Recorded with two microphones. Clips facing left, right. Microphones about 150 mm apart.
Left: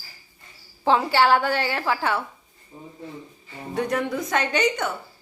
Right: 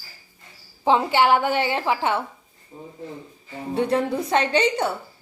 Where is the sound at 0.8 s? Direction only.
20° right (ahead or behind).